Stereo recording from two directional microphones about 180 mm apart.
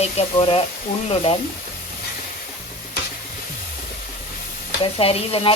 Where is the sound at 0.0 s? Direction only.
35° left (ahead or behind).